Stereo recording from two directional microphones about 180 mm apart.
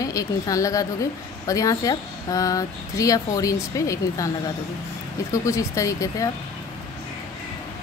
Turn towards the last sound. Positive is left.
turn(degrees=20)  # may be behind; listen again after turning